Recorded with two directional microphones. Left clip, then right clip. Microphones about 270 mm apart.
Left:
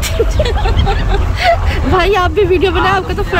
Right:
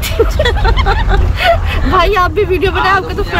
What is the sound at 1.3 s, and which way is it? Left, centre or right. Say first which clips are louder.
Speech: even; centre.